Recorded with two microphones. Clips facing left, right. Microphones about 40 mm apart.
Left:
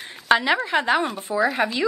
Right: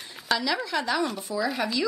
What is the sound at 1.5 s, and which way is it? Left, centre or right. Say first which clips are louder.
Speech: left 5 dB; left.